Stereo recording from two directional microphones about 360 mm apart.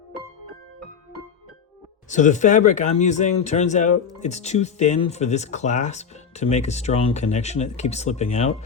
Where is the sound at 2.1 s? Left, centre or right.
Centre.